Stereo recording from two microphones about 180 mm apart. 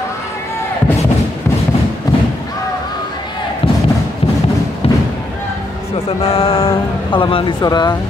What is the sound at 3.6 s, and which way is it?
Thump, 30° left (ahead or behind).